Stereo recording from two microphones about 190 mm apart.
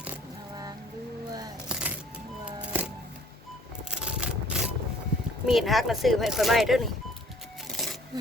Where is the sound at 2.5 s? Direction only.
5° right (ahead or behind).